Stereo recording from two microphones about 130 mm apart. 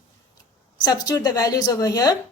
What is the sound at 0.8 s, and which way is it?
A woman's voice, 30° left (ahead or behind).